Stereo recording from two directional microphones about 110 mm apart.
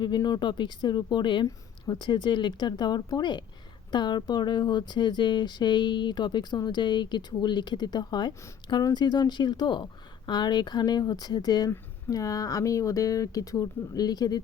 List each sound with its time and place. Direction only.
0.0 s speech: 40° left (ahead or behind)